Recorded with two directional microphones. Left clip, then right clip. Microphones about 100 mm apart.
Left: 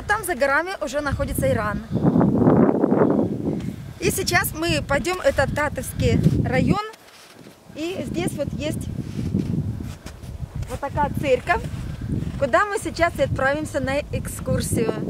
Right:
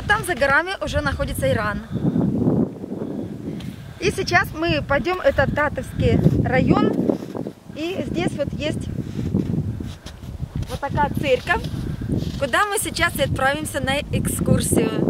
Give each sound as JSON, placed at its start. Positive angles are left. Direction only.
{"t": 0.1, "sound": "speech", "side_deg": 5}
{"t": 2.0, "sound": "a sound", "side_deg": 80}
{"t": 2.4, "sound": "a sound", "side_deg": 40}
{"t": 4.0, "sound": "speech", "side_deg": 30}
{"t": 10.8, "sound": "speech", "side_deg": 0}
{"t": 12.3, "sound": "speech", "side_deg": -25}